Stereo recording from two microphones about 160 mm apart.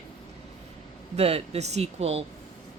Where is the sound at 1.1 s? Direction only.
40° right (ahead or behind).